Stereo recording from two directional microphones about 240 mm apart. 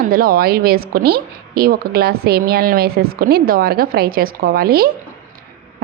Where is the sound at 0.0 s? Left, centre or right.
Right.